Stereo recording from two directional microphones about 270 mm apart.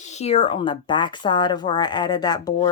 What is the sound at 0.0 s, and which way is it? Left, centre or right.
Speech, left.